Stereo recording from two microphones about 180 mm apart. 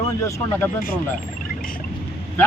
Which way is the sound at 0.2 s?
15° left (ahead or behind).